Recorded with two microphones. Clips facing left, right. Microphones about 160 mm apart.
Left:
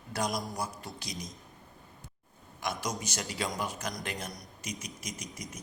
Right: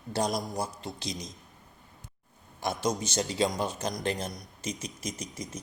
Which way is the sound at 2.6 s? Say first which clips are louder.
Right 5 dB; 30° right (ahead or behind).